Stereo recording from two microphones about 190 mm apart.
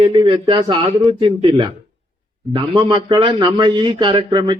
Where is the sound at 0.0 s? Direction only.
25° right (ahead or behind).